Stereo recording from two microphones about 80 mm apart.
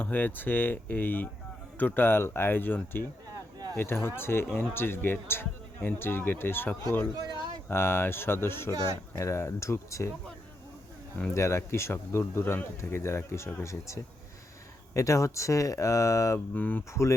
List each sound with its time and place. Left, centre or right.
0.0 s speech: left
3.3 s a sound: right
3.8 s speech: left
7.2 s a sound: right
7.7 s speech: left
11.3 s speech: left
16.6 s speech: left
16.9 s speech: left